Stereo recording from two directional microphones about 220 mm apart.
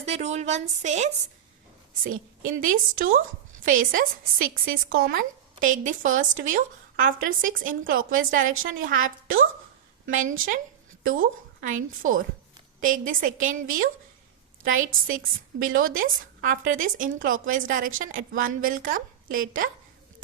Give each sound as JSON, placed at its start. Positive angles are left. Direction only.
{"t": 0.0, "sound": "a woman's voice", "side_deg": -30}
{"t": 2.4, "sound": "a woman's voice", "side_deg": -40}
{"t": 10.1, "sound": "a woman's voice", "side_deg": -35}
{"t": 15.6, "sound": "a woman's voice", "side_deg": -65}
{"t": 15.9, "sound": "a woman's voice", "side_deg": -40}